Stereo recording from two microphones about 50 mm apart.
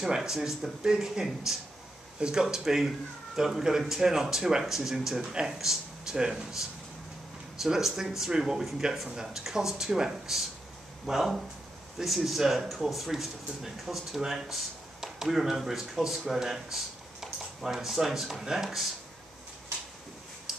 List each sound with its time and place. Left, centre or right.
0.0 s speech: centre
2.1 s speech: centre
7.6 s speech: centre